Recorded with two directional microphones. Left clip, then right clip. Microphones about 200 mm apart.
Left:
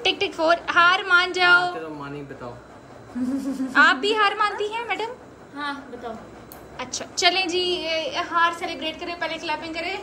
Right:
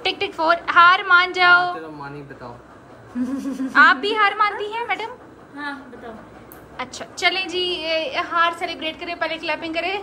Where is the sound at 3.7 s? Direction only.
Centre (ahead or behind).